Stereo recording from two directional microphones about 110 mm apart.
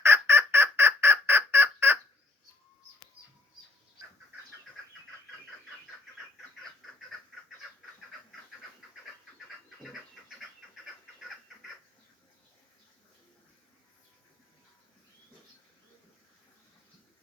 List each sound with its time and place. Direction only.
0.0 s fowl: 20° right (ahead or behind)